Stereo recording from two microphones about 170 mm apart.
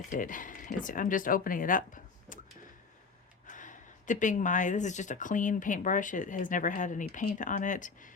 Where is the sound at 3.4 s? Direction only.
50° left (ahead or behind).